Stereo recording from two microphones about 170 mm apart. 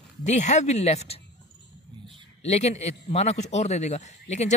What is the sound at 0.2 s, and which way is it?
Speech, 45° left (ahead or behind).